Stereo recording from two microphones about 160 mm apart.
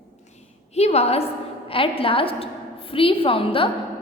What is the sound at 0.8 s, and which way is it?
A woman's voice, 40° left (ahead or behind).